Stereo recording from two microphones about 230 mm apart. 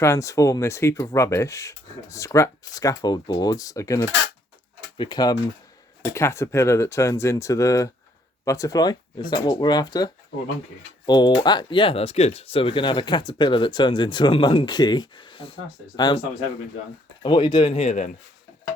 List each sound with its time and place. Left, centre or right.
0.0 s speech: centre
17.2 s speech: left